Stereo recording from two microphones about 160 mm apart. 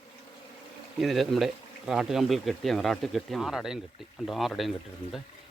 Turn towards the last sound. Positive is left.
turn(degrees=0)  # may be behind; listen again after turning